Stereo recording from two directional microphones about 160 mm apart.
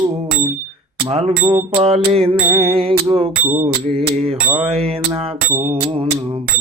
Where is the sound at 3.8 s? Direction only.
40° right (ahead or behind).